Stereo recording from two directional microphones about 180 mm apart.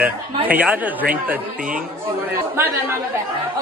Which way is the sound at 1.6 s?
50° right (ahead or behind).